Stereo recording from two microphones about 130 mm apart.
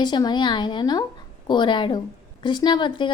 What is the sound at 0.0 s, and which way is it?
A woman's voice, 35° left (ahead or behind).